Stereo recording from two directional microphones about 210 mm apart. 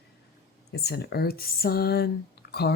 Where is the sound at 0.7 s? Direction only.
50° left (ahead or behind).